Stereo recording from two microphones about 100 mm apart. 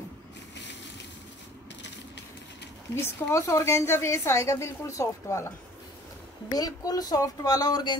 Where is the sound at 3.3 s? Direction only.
30° left (ahead or behind).